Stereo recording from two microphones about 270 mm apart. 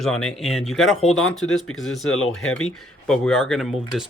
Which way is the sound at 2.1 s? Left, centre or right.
Left.